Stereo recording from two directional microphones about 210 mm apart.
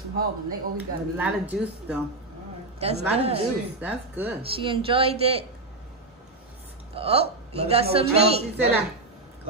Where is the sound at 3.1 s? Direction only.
30° right (ahead or behind).